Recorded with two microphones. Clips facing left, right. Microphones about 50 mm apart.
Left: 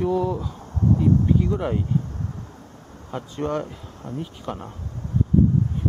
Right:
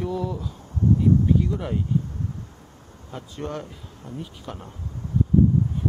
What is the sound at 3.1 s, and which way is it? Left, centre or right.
Speech, centre.